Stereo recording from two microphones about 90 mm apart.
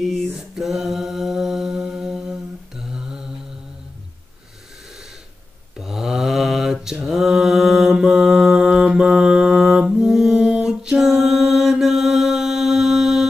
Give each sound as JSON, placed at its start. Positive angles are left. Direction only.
{"t": 0.0, "sound": "mantra", "side_deg": 0}
{"t": 5.8, "sound": "mantra", "side_deg": -5}